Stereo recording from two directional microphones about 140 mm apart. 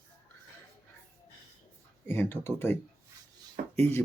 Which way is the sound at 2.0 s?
15° left (ahead or behind).